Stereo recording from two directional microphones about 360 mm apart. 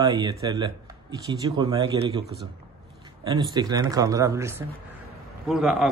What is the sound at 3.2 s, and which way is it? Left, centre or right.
A man's voice, centre.